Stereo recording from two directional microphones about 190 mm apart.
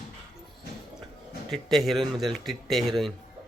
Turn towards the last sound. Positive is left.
turn(degrees=0)  # may be behind; listen again after turning